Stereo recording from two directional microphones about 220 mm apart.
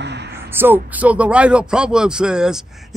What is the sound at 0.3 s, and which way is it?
Speech, 10° right (ahead or behind).